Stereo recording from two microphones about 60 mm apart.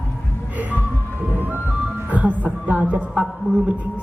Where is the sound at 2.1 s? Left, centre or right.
Right.